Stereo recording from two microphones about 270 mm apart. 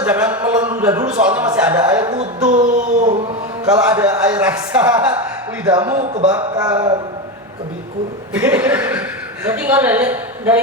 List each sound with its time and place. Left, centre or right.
0.0 s speech: centre
2.6 s a sound: right
3.7 s a woman's voice: centre
8.3 s a woman's voice: centre